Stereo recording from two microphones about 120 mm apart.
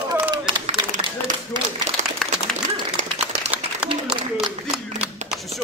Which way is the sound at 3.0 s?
90° right.